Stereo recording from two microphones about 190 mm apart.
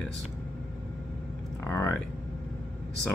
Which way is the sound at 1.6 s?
15° left (ahead or behind).